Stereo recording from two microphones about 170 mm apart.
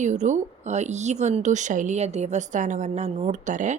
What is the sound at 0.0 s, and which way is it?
Speech, 45° right (ahead or behind).